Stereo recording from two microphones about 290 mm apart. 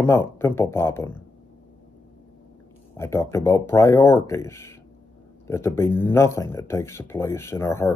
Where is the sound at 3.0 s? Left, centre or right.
Centre.